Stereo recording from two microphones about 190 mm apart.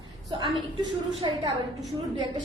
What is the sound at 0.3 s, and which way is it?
A woman's voice, 25° right (ahead or behind).